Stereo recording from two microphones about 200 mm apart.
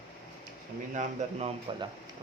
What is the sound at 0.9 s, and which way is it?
Speech, 30° right (ahead or behind).